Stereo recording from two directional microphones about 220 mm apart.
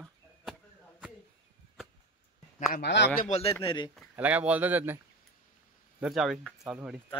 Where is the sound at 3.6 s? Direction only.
20° left (ahead or behind).